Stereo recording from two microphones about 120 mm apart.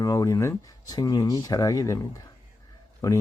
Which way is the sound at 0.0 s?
30° left (ahead or behind).